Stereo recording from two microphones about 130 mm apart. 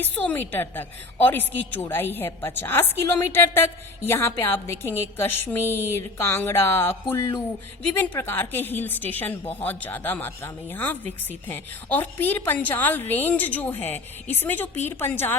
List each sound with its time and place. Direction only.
0.0 s a woman's voice: 10° left (ahead or behind)
7.1 s a sound: 20° left (ahead or behind)
7.9 s a woman's voice: 15° left (ahead or behind)